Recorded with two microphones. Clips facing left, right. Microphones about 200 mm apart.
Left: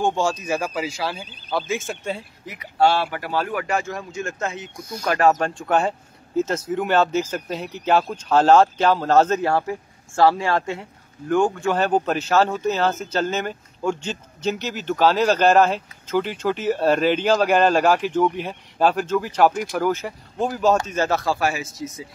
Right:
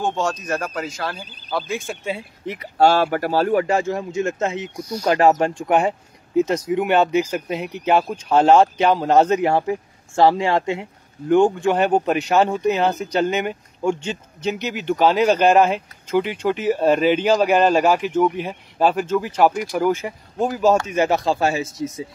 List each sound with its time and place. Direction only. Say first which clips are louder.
0.0 s speech: left 1 dB; 10° left (ahead or behind)
2.4 s speech: right 3 dB; 30° right (ahead or behind)